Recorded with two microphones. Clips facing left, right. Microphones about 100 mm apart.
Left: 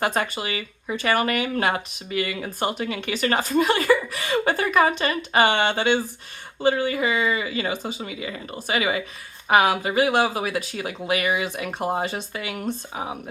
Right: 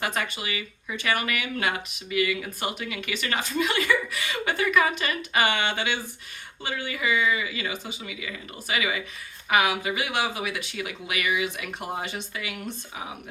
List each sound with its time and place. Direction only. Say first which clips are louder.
0.0 s speech: left 5 dB; 35° left (ahead or behind)